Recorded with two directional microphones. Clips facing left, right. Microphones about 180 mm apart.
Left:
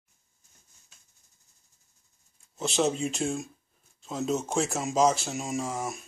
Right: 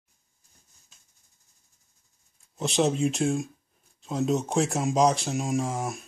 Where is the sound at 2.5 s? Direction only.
Centre (ahead or behind).